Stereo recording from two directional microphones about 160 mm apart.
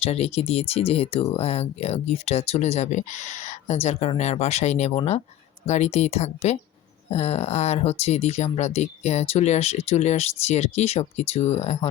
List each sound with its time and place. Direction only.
0.0 s speech: 40° left (ahead or behind)